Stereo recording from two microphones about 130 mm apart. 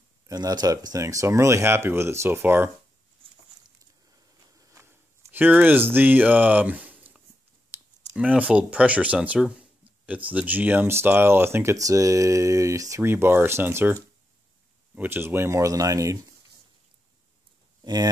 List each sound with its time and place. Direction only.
0.3 s speech: 30° right (ahead or behind)
4.6 s a sound: 20° right (ahead or behind)
7.7 s clicking: 15° right (ahead or behind)
8.2 s speech: 10° right (ahead or behind)
15.0 s speech: 15° right (ahead or behind)
17.8 s speech: 30° right (ahead or behind)